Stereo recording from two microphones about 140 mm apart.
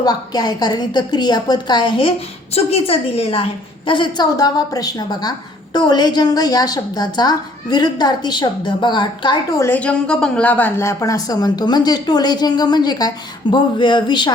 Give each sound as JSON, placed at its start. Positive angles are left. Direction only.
{"t": 0.0, "sound": "a woman's voice", "side_deg": 30}
{"t": 9.6, "sound": "a woman's voice", "side_deg": 15}